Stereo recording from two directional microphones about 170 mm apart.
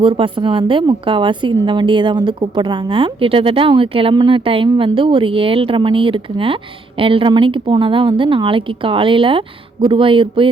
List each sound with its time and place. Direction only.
0.0 s speech: 30° right (ahead or behind)